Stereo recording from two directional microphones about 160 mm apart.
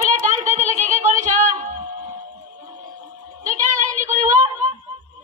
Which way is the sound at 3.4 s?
50° right (ahead or behind).